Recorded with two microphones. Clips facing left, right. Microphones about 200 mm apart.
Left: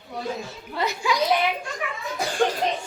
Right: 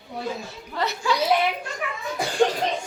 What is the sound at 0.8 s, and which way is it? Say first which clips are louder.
Speech: even; 10° left (ahead or behind).